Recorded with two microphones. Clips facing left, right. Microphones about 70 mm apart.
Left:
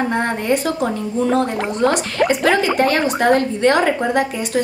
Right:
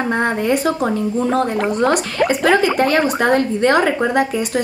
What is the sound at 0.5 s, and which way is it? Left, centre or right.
Speech, right.